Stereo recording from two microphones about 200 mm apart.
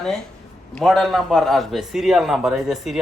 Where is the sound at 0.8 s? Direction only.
Centre (ahead or behind).